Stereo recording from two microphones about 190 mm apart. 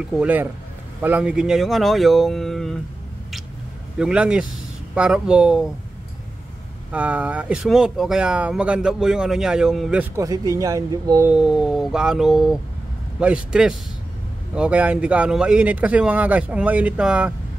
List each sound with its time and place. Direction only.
0.1 s speech: 5° right (ahead or behind)
4.0 s speech: 5° right (ahead or behind)
6.9 s speech: 5° right (ahead or behind)
10.2 s speech: 20° right (ahead or behind)
11.2 s speech: 5° right (ahead or behind)